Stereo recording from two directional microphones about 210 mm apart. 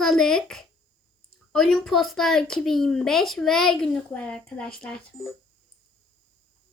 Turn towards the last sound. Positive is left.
turn(degrees=5)  # may be behind; listen again after turning